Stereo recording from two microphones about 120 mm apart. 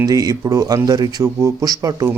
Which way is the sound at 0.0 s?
30° right (ahead or behind).